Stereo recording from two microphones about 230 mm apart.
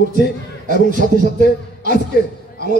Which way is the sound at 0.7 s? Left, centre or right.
Right.